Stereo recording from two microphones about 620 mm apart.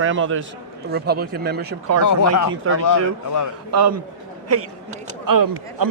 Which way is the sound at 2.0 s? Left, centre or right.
Left.